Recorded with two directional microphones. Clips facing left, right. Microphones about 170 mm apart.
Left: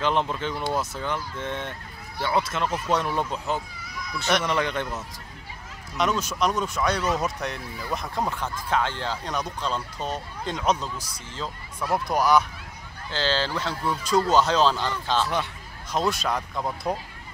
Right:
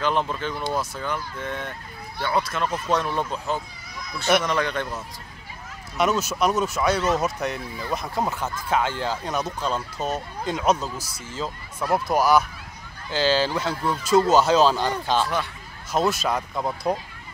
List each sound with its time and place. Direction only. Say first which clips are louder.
0.0 s speech: even; 20° left (ahead or behind)
5.9 s speech: right 3 dB; 5° right (ahead or behind)